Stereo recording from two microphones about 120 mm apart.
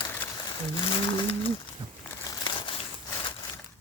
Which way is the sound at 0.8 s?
40° left (ahead or behind).